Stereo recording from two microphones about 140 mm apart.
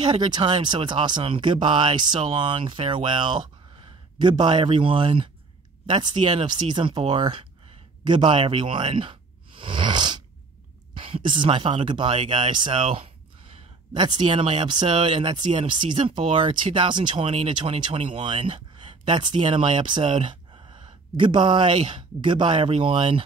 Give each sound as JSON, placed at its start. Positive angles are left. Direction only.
{"t": 0.1, "sound": "speech", "side_deg": -35}
{"t": 8.0, "sound": "a sound", "side_deg": -35}
{"t": 11.0, "sound": "speech", "side_deg": -35}